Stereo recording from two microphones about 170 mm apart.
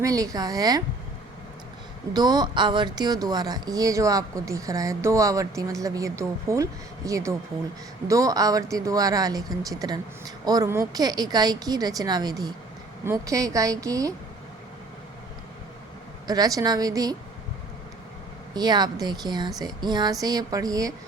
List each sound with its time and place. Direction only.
0.0 s speech: 20° right (ahead or behind)
2.1 s speech: 25° right (ahead or behind)
16.2 s speech: 20° right (ahead or behind)
18.5 s speech: 25° right (ahead or behind)